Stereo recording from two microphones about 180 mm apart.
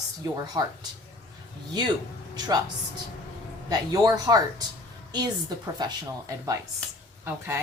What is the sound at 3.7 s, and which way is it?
Speech, 20° right (ahead or behind).